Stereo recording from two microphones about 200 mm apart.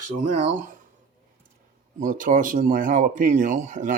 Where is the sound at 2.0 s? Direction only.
40° right (ahead or behind).